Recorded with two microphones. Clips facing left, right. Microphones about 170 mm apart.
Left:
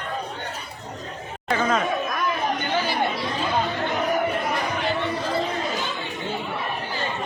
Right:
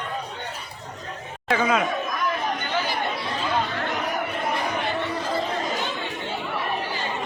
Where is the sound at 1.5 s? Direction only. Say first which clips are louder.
Right 1 dB; 10° right (ahead or behind).